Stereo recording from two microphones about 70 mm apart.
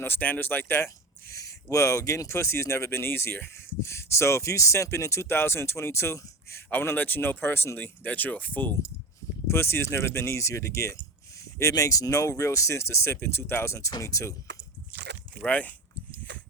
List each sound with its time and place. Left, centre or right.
0.0 s speech: left
1.3 s a sound: left
1.7 s speech: left
6.9 s speech: left
9.5 s speech: left
13.1 s speech: left
15.4 s speech: left